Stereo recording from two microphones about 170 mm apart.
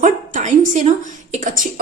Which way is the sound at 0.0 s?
45° right (ahead or behind).